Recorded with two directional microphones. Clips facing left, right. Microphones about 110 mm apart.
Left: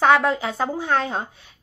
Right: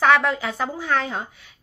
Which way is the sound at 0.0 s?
25° left (ahead or behind).